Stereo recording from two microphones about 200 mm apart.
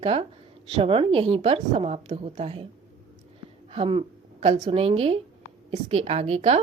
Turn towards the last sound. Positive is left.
turn(degrees=-30)  # may be behind; listen again after turning